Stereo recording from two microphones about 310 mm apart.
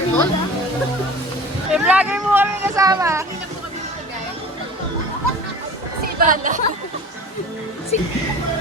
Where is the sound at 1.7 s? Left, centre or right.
Centre.